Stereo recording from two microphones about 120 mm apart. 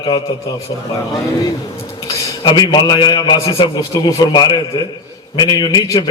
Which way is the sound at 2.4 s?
35° left (ahead or behind).